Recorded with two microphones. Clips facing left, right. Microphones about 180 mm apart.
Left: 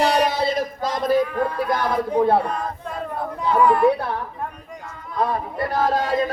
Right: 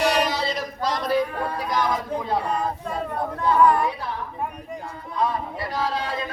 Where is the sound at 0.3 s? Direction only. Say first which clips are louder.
Left 5 dB; 55° left (ahead or behind).